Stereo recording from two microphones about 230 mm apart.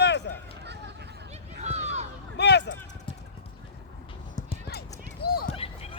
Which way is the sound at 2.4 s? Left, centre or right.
Left.